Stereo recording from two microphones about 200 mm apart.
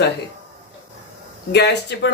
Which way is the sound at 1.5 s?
55° left (ahead or behind).